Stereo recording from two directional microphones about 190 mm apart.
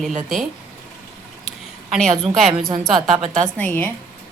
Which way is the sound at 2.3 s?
Centre (ahead or behind).